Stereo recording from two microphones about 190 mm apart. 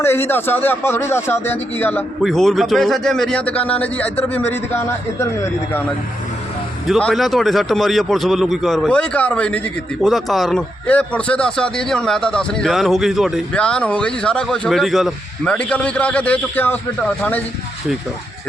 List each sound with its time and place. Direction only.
0.0 s a man's voice: 10° left (ahead or behind)
6.8 s a man's voice: centre (ahead or behind)